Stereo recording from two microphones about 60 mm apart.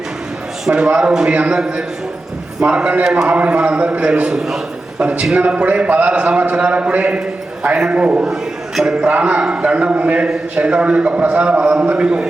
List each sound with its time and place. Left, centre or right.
0.7 s a man's voice: centre
4.4 s a sound: centre
5.4 s a man's voice: right
8.2 s a man's voice: centre
9.1 s a man's voice: right